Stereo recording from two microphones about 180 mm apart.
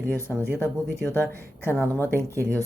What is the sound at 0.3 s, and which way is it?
Speech, 5° right (ahead or behind).